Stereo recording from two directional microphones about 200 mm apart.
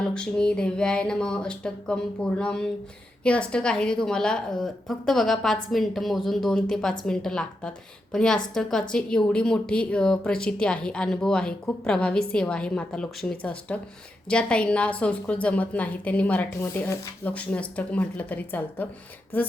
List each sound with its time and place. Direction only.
0.0 s a woman's voice: 5° left (ahead or behind)